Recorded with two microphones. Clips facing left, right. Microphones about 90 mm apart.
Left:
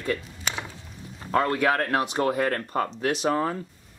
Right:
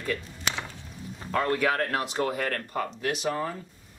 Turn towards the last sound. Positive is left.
turn(degrees=50)  # may be behind; listen again after turning